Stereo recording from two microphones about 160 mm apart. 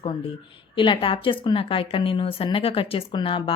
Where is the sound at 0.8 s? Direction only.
30° left (ahead or behind).